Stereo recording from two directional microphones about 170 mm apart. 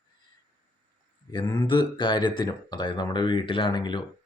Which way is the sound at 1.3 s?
25° left (ahead or behind).